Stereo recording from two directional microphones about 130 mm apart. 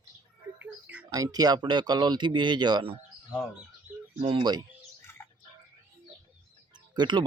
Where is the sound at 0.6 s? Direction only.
10° right (ahead or behind).